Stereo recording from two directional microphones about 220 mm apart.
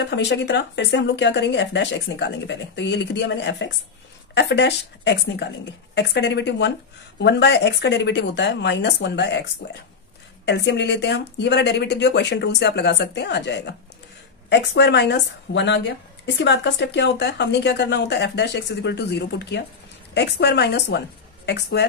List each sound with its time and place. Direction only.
0.0 s a woman's voice: 50° left (ahead or behind)